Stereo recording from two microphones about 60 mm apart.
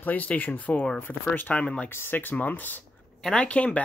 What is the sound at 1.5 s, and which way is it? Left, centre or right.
Speech, centre.